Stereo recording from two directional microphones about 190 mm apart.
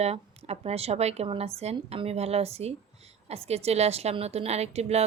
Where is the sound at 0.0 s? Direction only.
35° right (ahead or behind).